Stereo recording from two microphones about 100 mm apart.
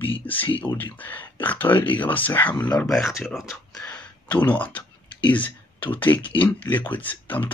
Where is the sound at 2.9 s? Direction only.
Centre (ahead or behind).